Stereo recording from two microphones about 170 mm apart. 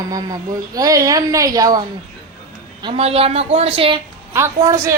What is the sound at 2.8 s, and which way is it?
Speech, 35° right (ahead or behind).